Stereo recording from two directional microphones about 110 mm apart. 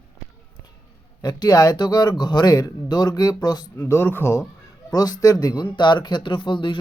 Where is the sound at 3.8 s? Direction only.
25° left (ahead or behind).